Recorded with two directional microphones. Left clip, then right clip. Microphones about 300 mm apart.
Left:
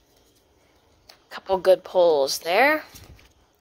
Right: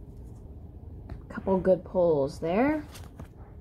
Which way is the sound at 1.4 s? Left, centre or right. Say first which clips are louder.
Left 6 dB; left.